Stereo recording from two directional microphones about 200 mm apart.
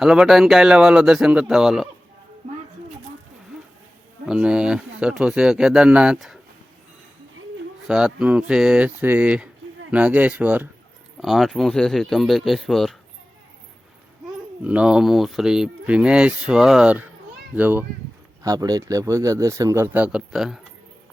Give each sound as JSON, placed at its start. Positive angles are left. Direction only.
{"t": 0.0, "sound": "speech", "side_deg": 0}
{"t": 4.3, "sound": "speech", "side_deg": -5}
{"t": 7.9, "sound": "speech", "side_deg": -5}
{"t": 14.6, "sound": "speech", "side_deg": -5}